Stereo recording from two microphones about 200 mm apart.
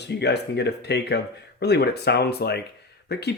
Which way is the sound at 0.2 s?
55° left (ahead or behind).